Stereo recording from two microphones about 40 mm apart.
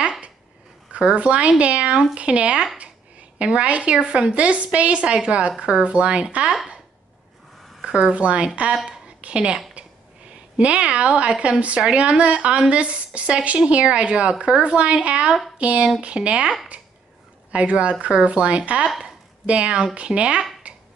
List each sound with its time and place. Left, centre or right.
0.9 s a woman's voice: right
7.8 s a woman's voice: right
9.0 s a sound: right
10.6 s a woman's voice: right
17.5 s a woman's voice: right
20.6 s a sound: right